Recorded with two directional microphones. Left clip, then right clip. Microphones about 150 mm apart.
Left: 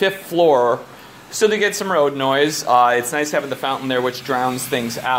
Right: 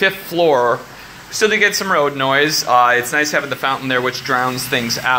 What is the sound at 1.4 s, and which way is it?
Speech, 30° left (ahead or behind).